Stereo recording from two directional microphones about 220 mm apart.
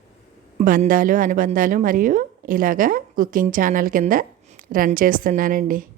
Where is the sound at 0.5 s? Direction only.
35° right (ahead or behind).